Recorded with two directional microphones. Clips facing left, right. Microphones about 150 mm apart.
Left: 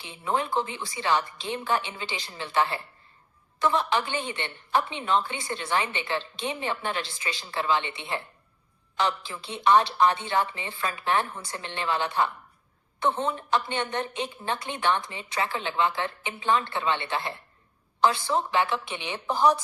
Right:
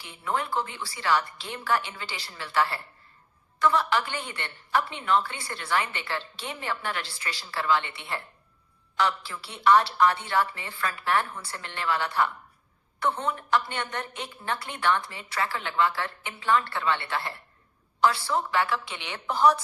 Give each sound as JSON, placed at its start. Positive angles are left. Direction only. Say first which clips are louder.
{"t": 0.0, "sound": "a woman's voice", "louder": "left 2 dB", "side_deg": 20}